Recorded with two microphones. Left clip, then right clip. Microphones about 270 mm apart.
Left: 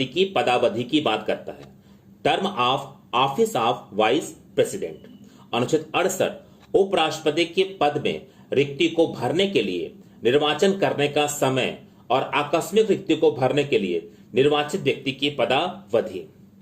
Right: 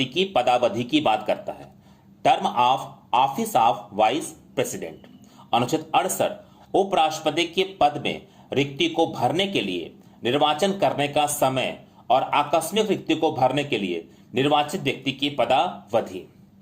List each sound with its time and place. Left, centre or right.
0.0 s speech: right